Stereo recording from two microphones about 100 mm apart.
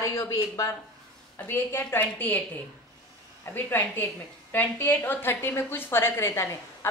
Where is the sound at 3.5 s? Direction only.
20° left (ahead or behind).